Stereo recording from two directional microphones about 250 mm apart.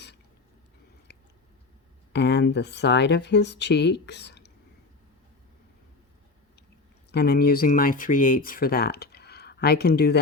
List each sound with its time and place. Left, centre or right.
1.1 s biting: left
2.1 s speech: left
7.1 s speech: left